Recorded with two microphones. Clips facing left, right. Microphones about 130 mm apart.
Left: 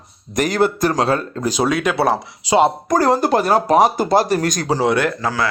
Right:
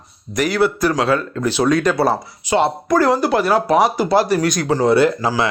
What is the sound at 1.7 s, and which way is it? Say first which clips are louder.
Speech: right 3 dB; 5° left (ahead or behind).